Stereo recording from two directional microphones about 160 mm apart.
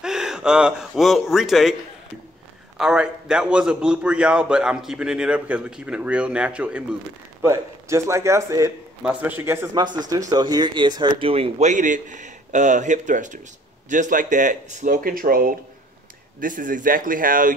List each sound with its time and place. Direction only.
0.0 s speech: 5° right (ahead or behind)
2.8 s a man's voice: 5° right (ahead or behind)
7.4 s a man's voice: 15° right (ahead or behind); by 17.6 s 60° right (ahead or behind)